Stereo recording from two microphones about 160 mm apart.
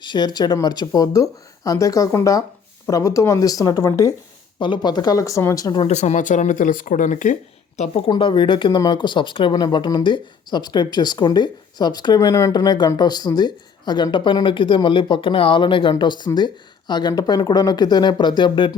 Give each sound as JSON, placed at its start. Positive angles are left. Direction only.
{"t": 0.0, "sound": "speech", "side_deg": 25}
{"t": 5.9, "sound": "speech", "side_deg": 45}
{"t": 7.8, "sound": "speech", "side_deg": 35}